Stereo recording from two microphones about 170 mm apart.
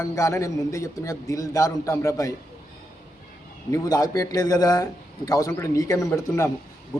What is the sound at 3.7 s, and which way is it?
A man's voice, 20° left (ahead or behind).